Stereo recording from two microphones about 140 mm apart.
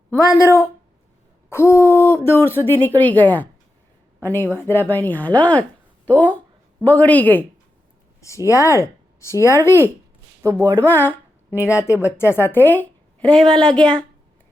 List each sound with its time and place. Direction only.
0.3 s a woman's voice: 20° left (ahead or behind)
10.4 s speech: 25° right (ahead or behind)
10.8 s a woman's voice: 15° left (ahead or behind)
11.1 s a sound: 10° right (ahead or behind)
11.7 s a woman's voice: 20° left (ahead or behind)